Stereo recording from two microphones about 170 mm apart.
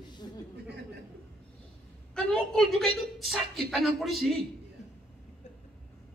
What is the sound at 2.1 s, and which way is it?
Speech, 5° left (ahead or behind).